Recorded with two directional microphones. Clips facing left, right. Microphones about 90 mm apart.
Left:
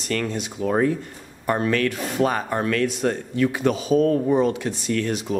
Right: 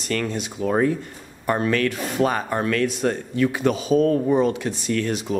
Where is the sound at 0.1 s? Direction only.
15° right (ahead or behind).